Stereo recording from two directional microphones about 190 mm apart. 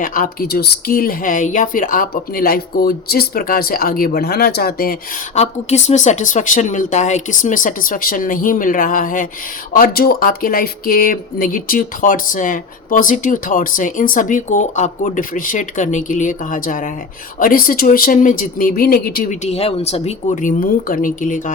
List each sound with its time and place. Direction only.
0.0 s speech: 45° left (ahead or behind)
5.3 s speech: 35° left (ahead or behind)